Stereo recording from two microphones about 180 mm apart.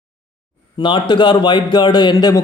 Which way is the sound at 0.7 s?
25° left (ahead or behind).